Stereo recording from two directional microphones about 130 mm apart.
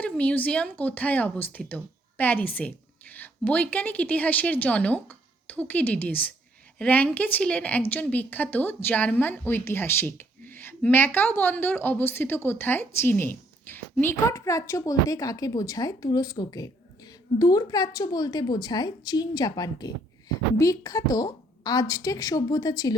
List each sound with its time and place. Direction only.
0.0 s a woman's voice: 10° left (ahead or behind); by 23.0 s 30° left (ahead or behind)